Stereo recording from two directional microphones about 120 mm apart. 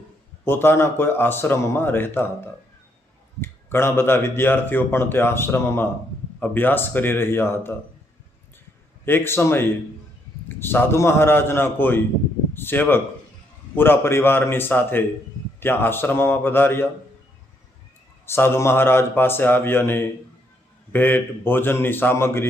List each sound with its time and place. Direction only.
0.4 s speech: 20° left (ahead or behind)
9.0 s speech: 20° left (ahead or behind)
18.3 s speech: 20° left (ahead or behind)